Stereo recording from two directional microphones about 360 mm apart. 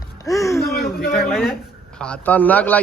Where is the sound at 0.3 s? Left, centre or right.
Centre.